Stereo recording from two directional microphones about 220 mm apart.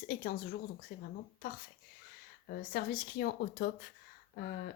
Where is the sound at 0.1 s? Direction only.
45° left (ahead or behind).